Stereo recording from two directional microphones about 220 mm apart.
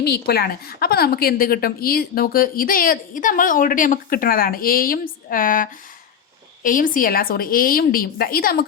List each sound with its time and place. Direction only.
0.0 s a woman's voice: 45° left (ahead or behind)